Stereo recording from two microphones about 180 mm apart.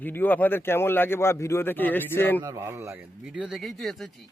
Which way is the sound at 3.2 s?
5° right (ahead or behind).